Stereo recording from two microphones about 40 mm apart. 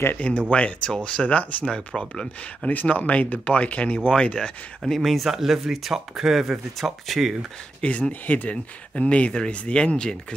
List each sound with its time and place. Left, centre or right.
0.1 s speech: left
4.8 s speech: centre
7.8 s speech: left
8.3 s speech: left
8.9 s speech: left